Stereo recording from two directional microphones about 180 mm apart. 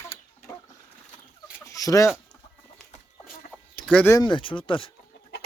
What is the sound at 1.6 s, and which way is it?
Chicken, 20° left (ahead or behind).